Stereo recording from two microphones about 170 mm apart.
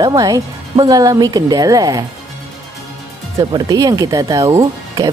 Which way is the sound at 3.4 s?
20° right (ahead or behind).